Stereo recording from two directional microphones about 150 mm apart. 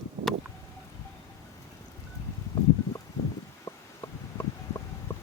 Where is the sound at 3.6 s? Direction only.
25° left (ahead or behind).